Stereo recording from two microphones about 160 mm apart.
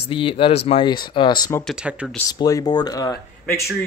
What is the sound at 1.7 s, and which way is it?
Speech, 5° right (ahead or behind).